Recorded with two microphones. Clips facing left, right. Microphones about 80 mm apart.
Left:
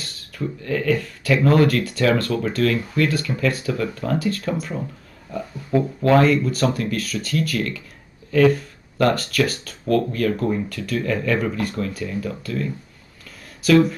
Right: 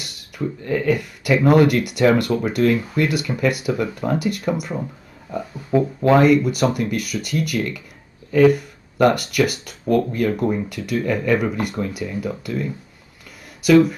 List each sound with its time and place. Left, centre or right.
0.0 s speech: centre